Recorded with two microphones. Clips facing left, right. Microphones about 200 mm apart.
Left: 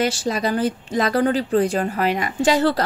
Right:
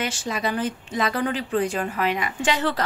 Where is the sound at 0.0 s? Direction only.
40° left (ahead or behind).